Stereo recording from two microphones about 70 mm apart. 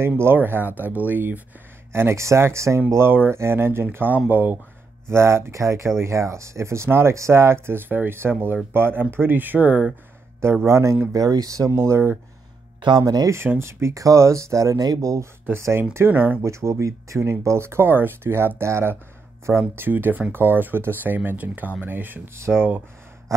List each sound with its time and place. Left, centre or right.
0.2 s speech: right
1.9 s speech: right
5.1 s speech: right
10.4 s speech: right
11.1 s speech: right
11.7 s speech: right
13.0 s speech: right
13.6 s speech: right
15.9 s speech: right
16.4 s speech: right